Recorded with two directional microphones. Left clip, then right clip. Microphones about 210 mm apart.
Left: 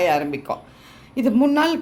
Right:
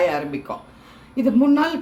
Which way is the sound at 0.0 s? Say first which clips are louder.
Left 2 dB; 45° left (ahead or behind).